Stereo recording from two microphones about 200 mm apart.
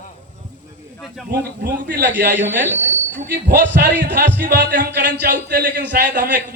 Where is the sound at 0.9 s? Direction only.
Centre (ahead or behind).